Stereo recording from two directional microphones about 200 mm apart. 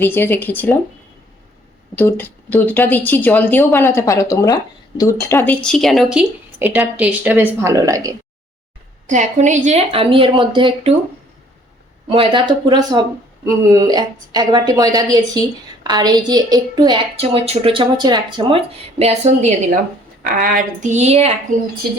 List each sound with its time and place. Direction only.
0.0 s a woman's voice: 10° left (ahead or behind)
2.0 s a woman's voice: 10° left (ahead or behind); by 8.1 s 15° right (ahead or behind)
9.0 s a woman's voice: 35° right (ahead or behind)
12.0 s a woman's voice: 25° right (ahead or behind)
20.2 s a woman's voice: 45° right (ahead or behind)